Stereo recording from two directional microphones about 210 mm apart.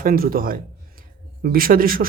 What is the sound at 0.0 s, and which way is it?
A man's voice, 40° right (ahead or behind).